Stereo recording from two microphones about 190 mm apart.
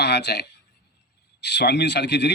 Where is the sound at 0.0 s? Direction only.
60° left (ahead or behind).